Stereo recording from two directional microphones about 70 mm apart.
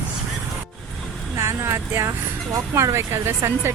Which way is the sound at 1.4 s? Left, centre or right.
Right.